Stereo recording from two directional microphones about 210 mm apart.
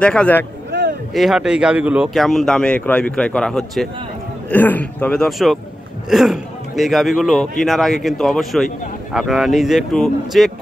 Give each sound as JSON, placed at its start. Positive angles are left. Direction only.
{"t": 0.0, "sound": "speech", "side_deg": 5}
{"t": 0.7, "sound": "a sound", "side_deg": -55}
{"t": 1.1, "sound": "a man's voice", "side_deg": 0}